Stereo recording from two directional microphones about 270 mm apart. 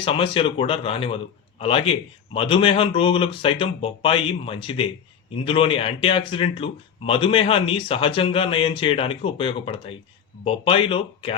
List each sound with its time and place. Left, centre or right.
0.0 s a man's voice: centre